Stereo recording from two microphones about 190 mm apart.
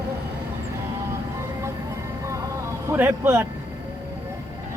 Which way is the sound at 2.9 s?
10° right (ahead or behind).